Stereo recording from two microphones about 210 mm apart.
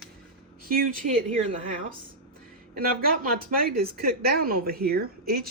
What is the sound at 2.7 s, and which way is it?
Speech, 45° right (ahead or behind).